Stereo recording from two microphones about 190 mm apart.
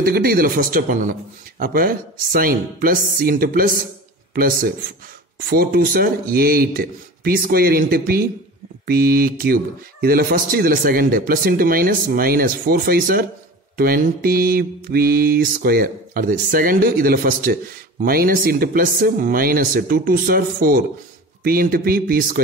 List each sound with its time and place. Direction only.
0.0 s speech: 50° right (ahead or behind)